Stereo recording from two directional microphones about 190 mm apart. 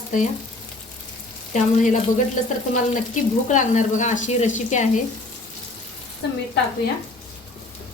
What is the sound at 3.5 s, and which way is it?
Speech, 40° left (ahead or behind).